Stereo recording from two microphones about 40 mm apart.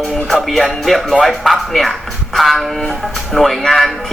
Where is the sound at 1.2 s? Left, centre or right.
Centre.